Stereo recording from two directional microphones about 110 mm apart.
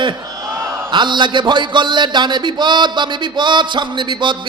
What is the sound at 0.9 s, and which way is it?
A man's voice, 45° right (ahead or behind).